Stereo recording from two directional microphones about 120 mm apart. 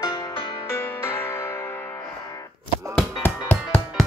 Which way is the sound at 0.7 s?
20° left (ahead or behind).